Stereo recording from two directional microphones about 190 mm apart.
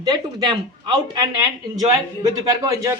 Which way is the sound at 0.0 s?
20° right (ahead or behind).